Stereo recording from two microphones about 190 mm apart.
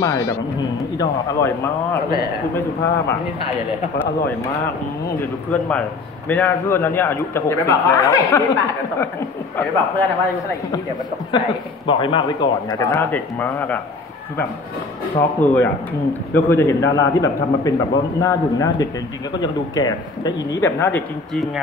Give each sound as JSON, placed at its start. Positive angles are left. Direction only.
{"t": 0.0, "sound": "a man's voice", "side_deg": 15}
{"t": 5.5, "sound": "a man's voice", "side_deg": 5}
{"t": 11.3, "sound": "speech", "side_deg": 25}
{"t": 15.1, "sound": "a man's voice", "side_deg": 10}